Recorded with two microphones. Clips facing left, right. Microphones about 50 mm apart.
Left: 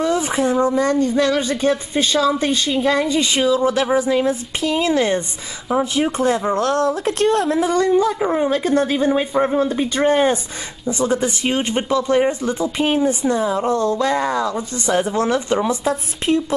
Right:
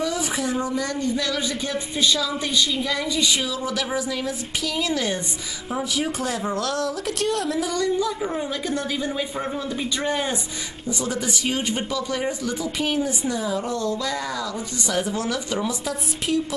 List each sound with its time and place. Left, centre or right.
0.0 s speech: left